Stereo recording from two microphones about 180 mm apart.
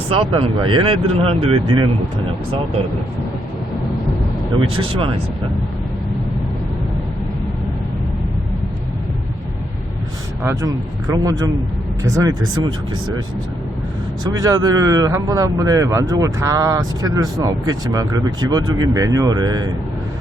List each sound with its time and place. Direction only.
0.1 s speech: 30° right (ahead or behind)
4.8 s speech: 30° right (ahead or behind)
10.4 s speech: 20° right (ahead or behind)
14.3 s speech: 20° right (ahead or behind)